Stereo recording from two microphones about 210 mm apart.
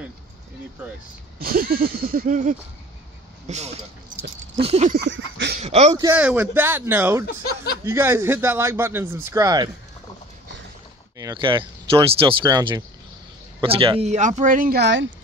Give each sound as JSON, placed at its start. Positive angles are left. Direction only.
{"t": 1.4, "sound": "speech", "side_deg": -45}
{"t": 4.9, "sound": "a sound", "side_deg": -55}
{"t": 5.6, "sound": "speech", "side_deg": -30}
{"t": 5.9, "sound": "speech", "side_deg": -10}
{"t": 11.1, "sound": "speech", "side_deg": -20}